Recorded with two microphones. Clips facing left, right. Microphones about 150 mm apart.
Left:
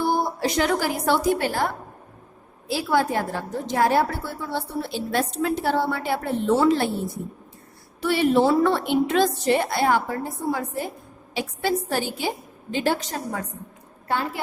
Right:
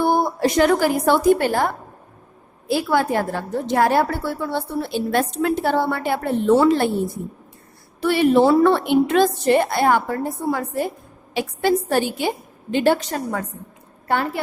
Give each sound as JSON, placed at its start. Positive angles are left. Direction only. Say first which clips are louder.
{"t": 0.0, "sound": "a woman's voice", "louder": "right 5 dB", "side_deg": -55}
{"t": 2.6, "sound": "a woman's voice", "louder": "right 3 dB", "side_deg": -60}
{"t": 8.0, "sound": "a woman's voice", "louder": "right 4 dB", "side_deg": -60}